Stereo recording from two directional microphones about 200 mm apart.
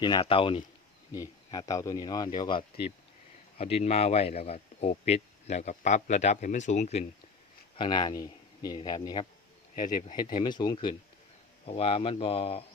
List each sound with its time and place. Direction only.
0.0 s speech: 25° left (ahead or behind)
7.8 s speech: 20° left (ahead or behind)
9.7 s speech: 45° left (ahead or behind)
10.4 s speech: 20° left (ahead or behind)